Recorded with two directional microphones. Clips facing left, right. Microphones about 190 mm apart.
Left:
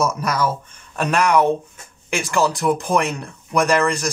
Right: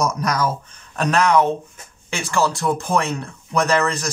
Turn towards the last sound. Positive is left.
turn(degrees=15)  # may be behind; listen again after turning